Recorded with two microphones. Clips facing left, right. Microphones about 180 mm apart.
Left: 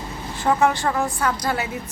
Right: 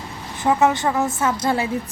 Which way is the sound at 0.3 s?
20° right (ahead or behind).